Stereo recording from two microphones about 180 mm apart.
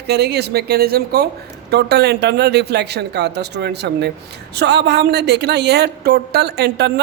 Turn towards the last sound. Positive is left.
turn(degrees=-65)  # may be behind; listen again after turning